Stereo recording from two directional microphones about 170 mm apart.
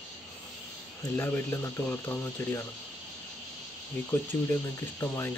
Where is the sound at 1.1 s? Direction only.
10° left (ahead or behind).